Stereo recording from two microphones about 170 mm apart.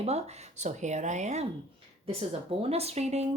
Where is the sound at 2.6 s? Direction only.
35° right (ahead or behind).